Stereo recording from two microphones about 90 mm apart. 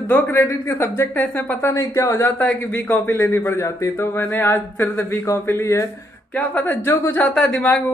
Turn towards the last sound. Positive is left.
turn(degrees=10)  # may be behind; listen again after turning